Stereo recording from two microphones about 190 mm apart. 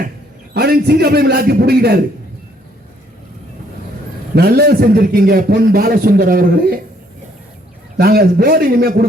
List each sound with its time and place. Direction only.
0.5 s a man's voice: 55° right (ahead or behind)
4.4 s a man's voice: 55° right (ahead or behind)
7.9 s a man's voice: 55° right (ahead or behind)